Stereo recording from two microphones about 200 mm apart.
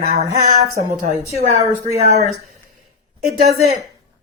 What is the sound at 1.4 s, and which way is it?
Speech, 35° right (ahead or behind).